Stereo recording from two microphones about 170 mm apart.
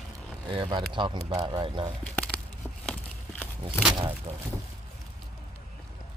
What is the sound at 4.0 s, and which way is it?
Speech, 30° right (ahead or behind).